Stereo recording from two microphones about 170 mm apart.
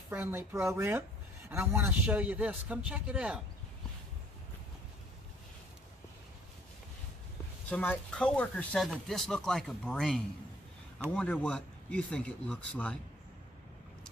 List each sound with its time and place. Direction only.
0.1 s a man's voice: 15° right (ahead or behind)
7.7 s speech: 10° left (ahead or behind)